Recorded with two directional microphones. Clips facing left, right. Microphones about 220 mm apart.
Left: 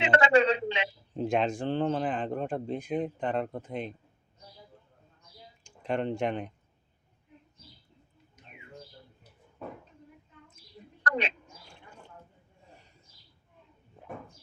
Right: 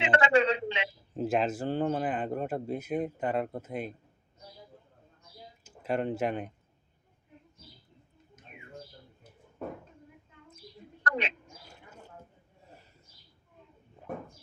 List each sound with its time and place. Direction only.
0.0 s a sound: 35° left (ahead or behind)
1.1 s speech: 5° right (ahead or behind)
5.6 s speech: 5° right (ahead or behind)
11.0 s bird: 35° left (ahead or behind)